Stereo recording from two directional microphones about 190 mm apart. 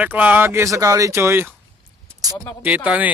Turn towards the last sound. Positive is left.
turn(degrees=-5)  # may be behind; listen again after turning